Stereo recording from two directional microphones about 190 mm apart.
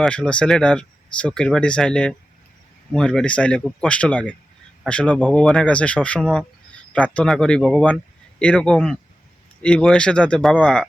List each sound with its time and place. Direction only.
0.0 s speech: 5° left (ahead or behind)